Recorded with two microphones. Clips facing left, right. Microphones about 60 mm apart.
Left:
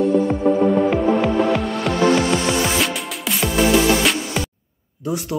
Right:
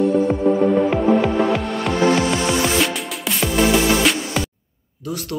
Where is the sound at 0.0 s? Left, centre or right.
Centre.